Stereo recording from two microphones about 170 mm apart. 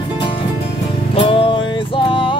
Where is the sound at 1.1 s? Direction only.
30° left (ahead or behind).